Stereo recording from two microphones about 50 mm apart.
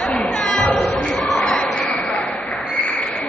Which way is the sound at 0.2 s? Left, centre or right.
Centre.